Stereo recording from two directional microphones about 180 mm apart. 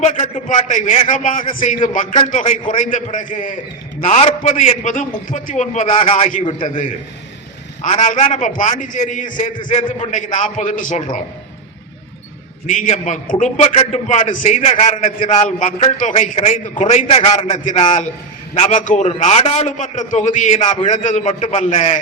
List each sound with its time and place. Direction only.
0.0 s a man's voice: 35° left (ahead or behind)
5.9 s a man's voice: 30° left (ahead or behind)
6.7 s a man's voice: 45° left (ahead or behind)
12.6 s a man's voice: 45° left (ahead or behind)
17.6 s a man's voice: 45° left (ahead or behind)
18.8 s a man's voice: 45° left (ahead or behind)
19.0 s a man's voice: 35° left (ahead or behind)